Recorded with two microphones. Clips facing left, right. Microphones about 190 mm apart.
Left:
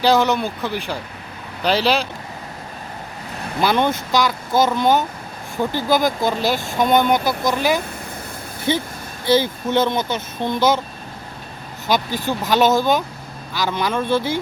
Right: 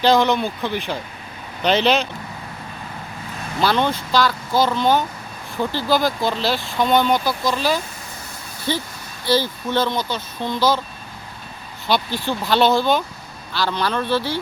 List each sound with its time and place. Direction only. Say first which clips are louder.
0.0 s speech: even; 10° left (ahead or behind)
3.6 s speech: left 1 dB; 15° left (ahead or behind)
11.9 s speech: left 1 dB; 45° left (ahead or behind)
12.4 s speech: left 1 dB; 15° left (ahead or behind)